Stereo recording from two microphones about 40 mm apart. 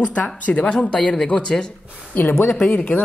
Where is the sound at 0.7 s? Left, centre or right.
Left.